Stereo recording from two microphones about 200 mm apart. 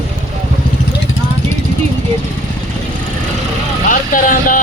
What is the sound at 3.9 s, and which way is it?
Speech, 40° left (ahead or behind).